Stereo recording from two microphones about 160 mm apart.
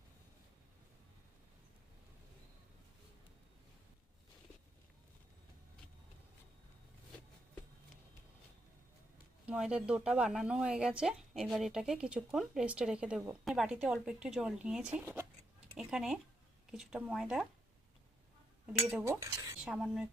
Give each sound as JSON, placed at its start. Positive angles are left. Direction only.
{"t": 9.5, "sound": "speech", "side_deg": -5}
{"t": 15.7, "sound": "a sound", "side_deg": -5}
{"t": 16.7, "sound": "speech", "side_deg": -5}
{"t": 18.6, "sound": "speech", "side_deg": -5}
{"t": 19.2, "sound": "speech", "side_deg": -20}
{"t": 19.6, "sound": "speech", "side_deg": -5}